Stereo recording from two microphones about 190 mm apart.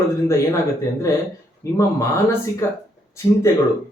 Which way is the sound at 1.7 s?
15° left (ahead or behind).